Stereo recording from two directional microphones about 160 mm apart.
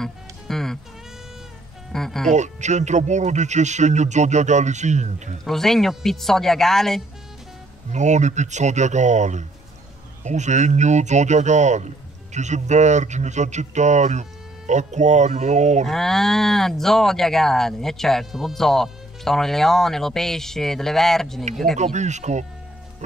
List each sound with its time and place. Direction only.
0.0 s music: centre (ahead or behind)
1.9 s speech: 5° left (ahead or behind)
2.3 s speech: 45° right (ahead or behind)
5.4 s speech: centre (ahead or behind)
7.9 s speech: 45° right (ahead or behind)
15.9 s speech: centre (ahead or behind)
21.7 s speech: 45° right (ahead or behind)